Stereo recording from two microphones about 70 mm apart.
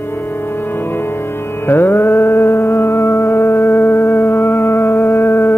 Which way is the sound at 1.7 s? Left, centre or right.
Left.